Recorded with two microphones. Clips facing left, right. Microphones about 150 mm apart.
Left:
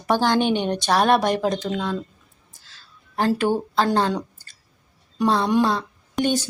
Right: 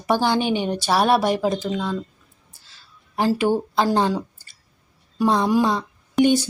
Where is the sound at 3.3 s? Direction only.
10° right (ahead or behind).